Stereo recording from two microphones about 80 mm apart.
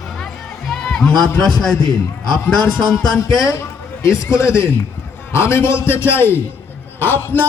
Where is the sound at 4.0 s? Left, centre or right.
Left.